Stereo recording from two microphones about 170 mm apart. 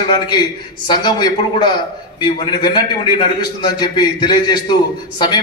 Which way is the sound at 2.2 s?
30° left (ahead or behind).